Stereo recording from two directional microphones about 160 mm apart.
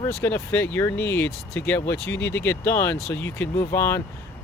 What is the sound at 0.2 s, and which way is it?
Speech, 15° left (ahead or behind).